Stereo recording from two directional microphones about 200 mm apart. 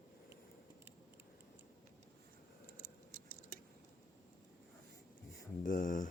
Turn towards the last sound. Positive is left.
turn(degrees=40)  # may be behind; listen again after turning